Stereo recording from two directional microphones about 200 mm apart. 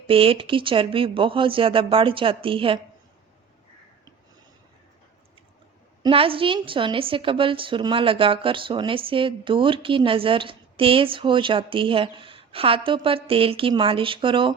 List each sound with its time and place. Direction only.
0.1 s a woman's voice: 25° right (ahead or behind)
6.0 s a woman's voice: 25° right (ahead or behind)